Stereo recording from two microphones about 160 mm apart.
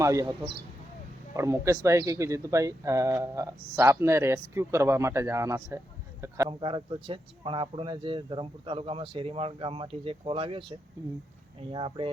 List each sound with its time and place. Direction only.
0.0 s speech: 20° right (ahead or behind)
6.5 s speech: 30° right (ahead or behind)